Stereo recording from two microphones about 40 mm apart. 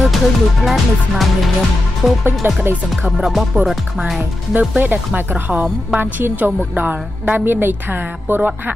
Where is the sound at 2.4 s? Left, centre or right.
Right.